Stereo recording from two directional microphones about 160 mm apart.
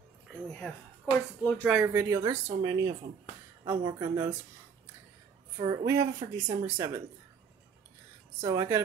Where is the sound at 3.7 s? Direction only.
25° right (ahead or behind).